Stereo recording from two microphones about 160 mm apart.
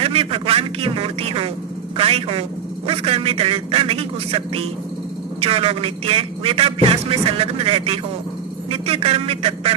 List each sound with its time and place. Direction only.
0.0 s a man's voice: 35° right (ahead or behind)